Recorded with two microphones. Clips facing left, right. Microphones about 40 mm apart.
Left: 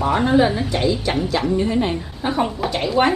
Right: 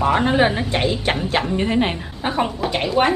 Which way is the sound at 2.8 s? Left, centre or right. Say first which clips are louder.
Left 1 dB; centre.